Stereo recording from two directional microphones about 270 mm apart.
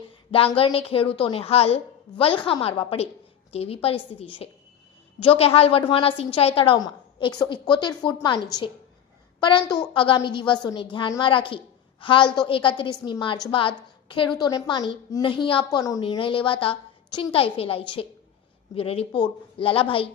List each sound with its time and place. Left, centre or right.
0.3 s a woman's voice: left